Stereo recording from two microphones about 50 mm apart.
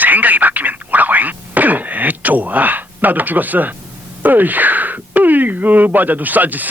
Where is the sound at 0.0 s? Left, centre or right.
Right.